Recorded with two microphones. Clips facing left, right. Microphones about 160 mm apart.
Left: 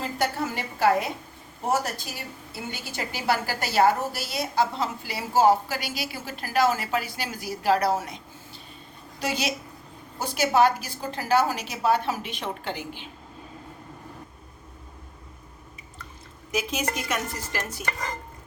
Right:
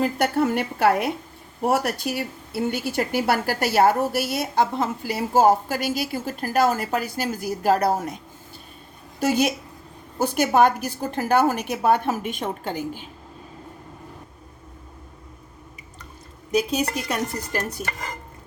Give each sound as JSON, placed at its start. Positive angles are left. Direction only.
{"t": 0.0, "sound": "a woman's voice", "side_deg": -60}
{"t": 9.2, "sound": "a woman's voice", "side_deg": -50}
{"t": 16.5, "sound": "a woman's voice", "side_deg": -35}